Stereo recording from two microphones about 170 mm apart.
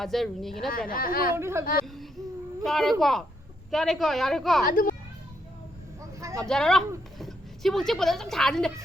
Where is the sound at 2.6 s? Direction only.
Centre (ahead or behind).